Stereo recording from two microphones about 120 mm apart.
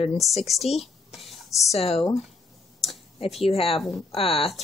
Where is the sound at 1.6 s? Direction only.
60° left (ahead or behind).